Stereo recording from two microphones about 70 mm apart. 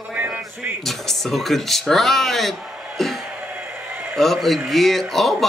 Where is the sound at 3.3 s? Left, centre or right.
Right.